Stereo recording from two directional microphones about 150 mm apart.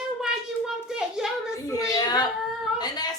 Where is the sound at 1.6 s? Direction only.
20° left (ahead or behind).